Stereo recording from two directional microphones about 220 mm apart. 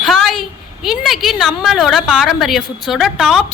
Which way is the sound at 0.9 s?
Centre (ahead or behind).